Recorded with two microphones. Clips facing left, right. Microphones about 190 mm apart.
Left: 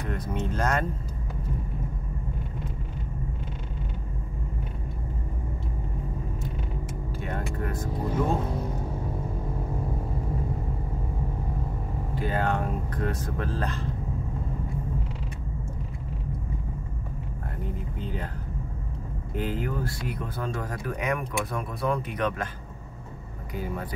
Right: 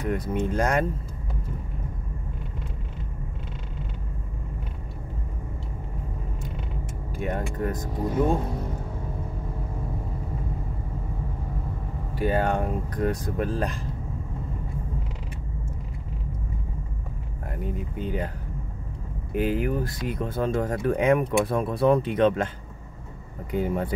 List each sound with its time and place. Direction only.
0.0 s speech: 10° right (ahead or behind)
7.2 s speech: 20° right (ahead or behind)
12.2 s speech: 15° right (ahead or behind)
17.6 s speech: 15° right (ahead or behind)
19.3 s speech: 15° right (ahead or behind)
23.5 s speech: 25° right (ahead or behind)